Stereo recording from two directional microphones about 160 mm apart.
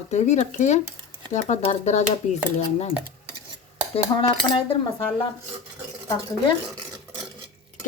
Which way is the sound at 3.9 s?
35° left (ahead or behind).